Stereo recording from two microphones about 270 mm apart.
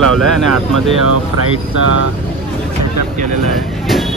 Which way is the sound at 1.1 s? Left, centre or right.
Right.